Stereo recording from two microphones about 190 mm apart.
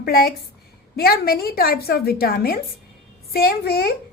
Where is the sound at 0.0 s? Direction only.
55° left (ahead or behind).